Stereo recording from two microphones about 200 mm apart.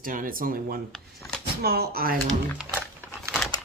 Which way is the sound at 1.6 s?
50° right (ahead or behind).